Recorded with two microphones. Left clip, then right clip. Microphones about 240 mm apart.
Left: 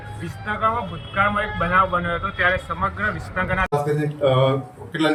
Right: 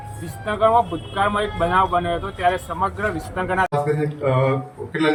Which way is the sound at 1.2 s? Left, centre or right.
Right.